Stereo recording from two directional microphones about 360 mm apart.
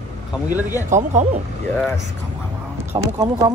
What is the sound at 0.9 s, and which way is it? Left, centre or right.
Speech, centre.